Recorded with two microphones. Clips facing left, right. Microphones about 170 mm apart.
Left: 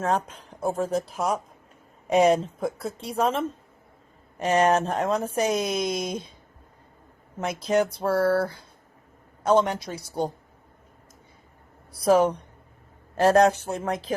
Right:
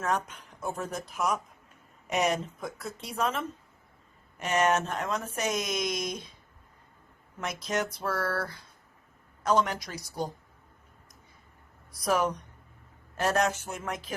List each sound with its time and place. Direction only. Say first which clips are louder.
0.0 s a woman's voice: left 5 dB; 30° left (ahead or behind)
7.3 s a woman's voice: left 8 dB; 30° left (ahead or behind)
11.9 s a woman's voice: left 8 dB; 30° left (ahead or behind)